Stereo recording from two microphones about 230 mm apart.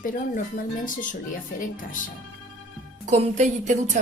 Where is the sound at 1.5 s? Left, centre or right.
Left.